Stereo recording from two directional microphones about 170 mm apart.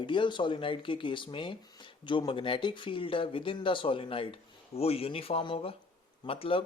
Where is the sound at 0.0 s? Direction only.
30° left (ahead or behind).